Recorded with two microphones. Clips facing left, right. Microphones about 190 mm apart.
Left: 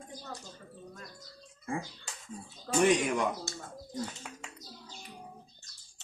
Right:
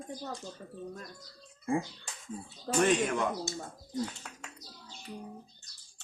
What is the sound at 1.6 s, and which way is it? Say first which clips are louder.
Speech: right 5 dB; 25° right (ahead or behind).